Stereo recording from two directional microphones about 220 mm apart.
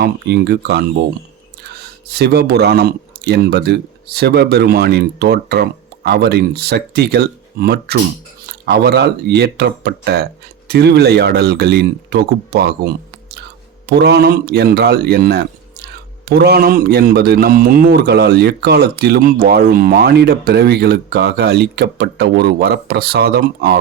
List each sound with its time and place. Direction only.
0.0 s a man's voice: 45° right (ahead or behind)